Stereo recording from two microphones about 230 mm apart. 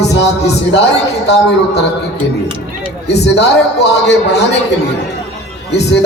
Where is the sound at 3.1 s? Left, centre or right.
Left.